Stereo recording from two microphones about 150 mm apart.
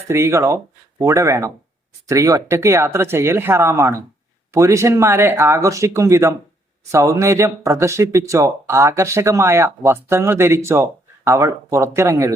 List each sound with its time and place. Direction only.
0.1 s speech: 20° right (ahead or behind)